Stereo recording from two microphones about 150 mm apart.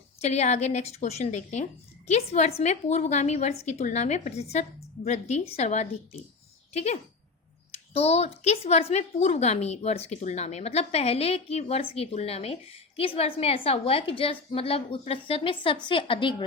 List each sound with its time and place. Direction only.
0.2 s a woman's voice: 50° left (ahead or behind)